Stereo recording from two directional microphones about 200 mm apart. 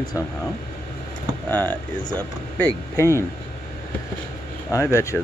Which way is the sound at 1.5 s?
10° left (ahead or behind).